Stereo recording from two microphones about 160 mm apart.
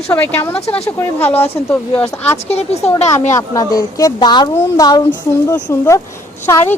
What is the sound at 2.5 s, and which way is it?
Speech, 40° left (ahead or behind).